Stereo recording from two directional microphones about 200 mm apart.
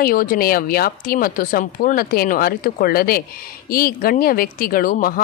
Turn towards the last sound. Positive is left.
turn(degrees=45)  # may be behind; listen again after turning